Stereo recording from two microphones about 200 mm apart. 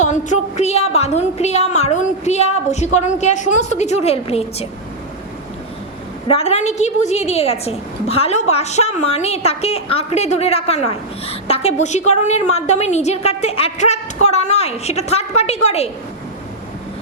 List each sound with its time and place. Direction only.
0.0 s a woman's voice: 35° left (ahead or behind)
6.2 s a woman's voice: 30° left (ahead or behind)